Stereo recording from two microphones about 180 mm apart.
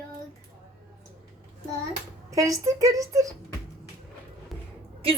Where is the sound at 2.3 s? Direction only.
20° right (ahead or behind).